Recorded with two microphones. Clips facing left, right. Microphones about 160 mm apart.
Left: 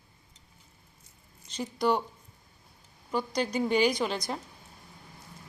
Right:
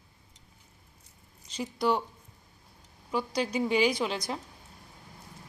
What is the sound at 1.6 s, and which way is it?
Speech, 5° right (ahead or behind).